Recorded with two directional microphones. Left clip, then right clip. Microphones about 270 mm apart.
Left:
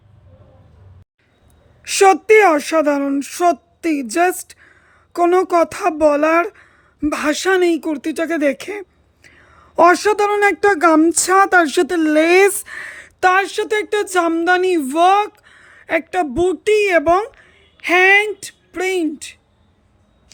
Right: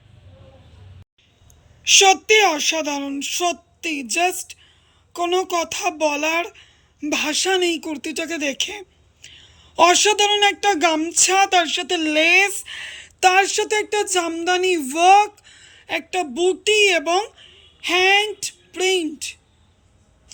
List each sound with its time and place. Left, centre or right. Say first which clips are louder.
2.0 s speech: left 4 dB; centre